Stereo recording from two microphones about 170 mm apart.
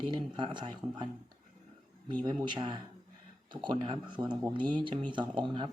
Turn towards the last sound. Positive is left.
turn(degrees=-30)  # may be behind; listen again after turning